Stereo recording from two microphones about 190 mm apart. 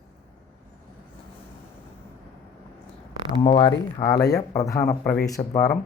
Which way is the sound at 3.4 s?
30° left (ahead or behind).